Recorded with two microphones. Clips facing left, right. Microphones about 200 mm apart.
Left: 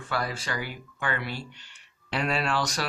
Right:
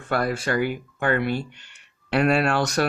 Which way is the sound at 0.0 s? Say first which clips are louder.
Right 7 dB; 55° right (ahead or behind).